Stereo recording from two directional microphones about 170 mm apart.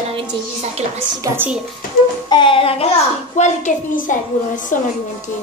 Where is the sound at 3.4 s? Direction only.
50° left (ahead or behind).